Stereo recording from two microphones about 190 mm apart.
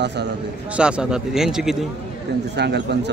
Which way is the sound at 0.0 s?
65° right (ahead or behind).